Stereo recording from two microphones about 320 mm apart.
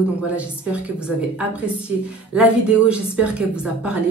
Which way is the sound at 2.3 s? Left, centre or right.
Centre.